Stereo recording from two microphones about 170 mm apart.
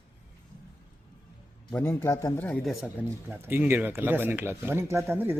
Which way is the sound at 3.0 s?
10° right (ahead or behind).